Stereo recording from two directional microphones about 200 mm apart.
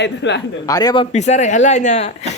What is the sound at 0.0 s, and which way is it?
Speech, 60° left (ahead or behind).